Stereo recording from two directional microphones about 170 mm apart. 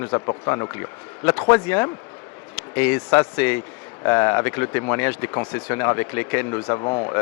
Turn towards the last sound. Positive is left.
turn(degrees=30)  # may be behind; listen again after turning